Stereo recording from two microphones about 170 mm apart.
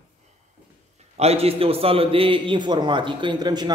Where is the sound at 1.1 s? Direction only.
35° right (ahead or behind).